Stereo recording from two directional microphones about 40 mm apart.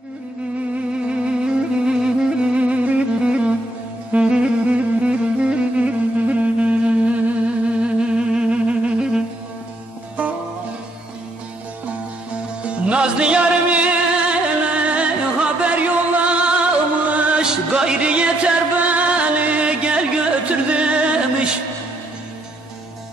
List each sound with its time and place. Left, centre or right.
1.0 s music: right
2.6 s music: right
12.6 s music: right
13.4 s music: right
17.4 s music: centre